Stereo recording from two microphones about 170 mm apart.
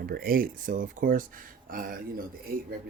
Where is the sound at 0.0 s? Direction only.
60° right (ahead or behind).